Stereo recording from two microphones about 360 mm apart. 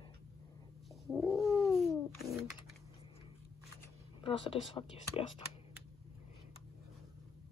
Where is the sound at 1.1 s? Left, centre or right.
Centre.